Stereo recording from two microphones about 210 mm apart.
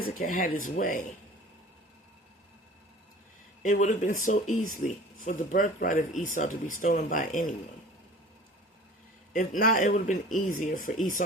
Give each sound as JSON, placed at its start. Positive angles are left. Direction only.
{"t": 0.0, "sound": "speech", "side_deg": 40}
{"t": 3.6, "sound": "speech", "side_deg": 35}
{"t": 9.6, "sound": "speech", "side_deg": 40}